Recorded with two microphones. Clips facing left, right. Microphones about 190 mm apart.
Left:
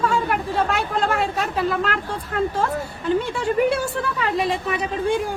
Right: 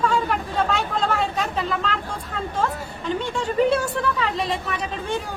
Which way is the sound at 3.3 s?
10° left (ahead or behind).